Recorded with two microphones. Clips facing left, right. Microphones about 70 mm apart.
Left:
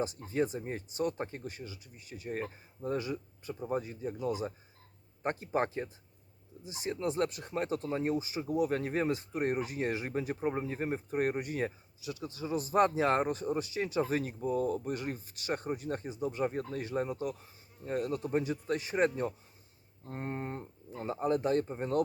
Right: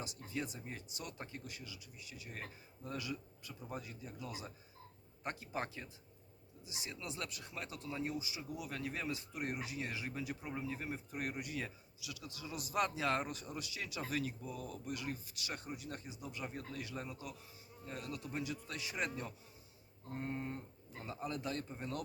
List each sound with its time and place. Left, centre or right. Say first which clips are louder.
0.0 s speech: left 11 dB; left